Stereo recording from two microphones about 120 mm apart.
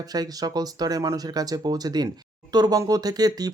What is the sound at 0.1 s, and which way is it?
Speech, 35° right (ahead or behind).